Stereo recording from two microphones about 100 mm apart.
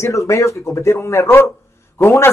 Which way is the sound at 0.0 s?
30° left (ahead or behind).